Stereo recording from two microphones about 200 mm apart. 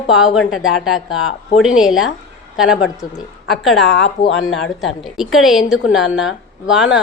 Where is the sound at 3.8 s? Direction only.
60° left (ahead or behind).